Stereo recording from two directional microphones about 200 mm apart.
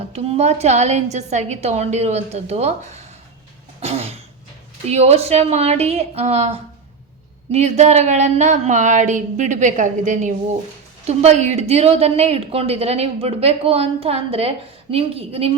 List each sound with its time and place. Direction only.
0.0 s a woman's voice: 30° right (ahead or behind)
3.8 s cough: 30° right (ahead or behind)
4.9 s a woman's voice: 30° right (ahead or behind)